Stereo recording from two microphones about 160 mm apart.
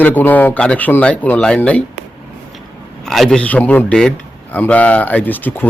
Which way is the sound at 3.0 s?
Centre (ahead or behind).